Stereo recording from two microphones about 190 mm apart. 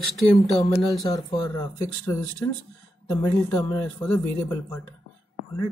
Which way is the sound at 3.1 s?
10° left (ahead or behind).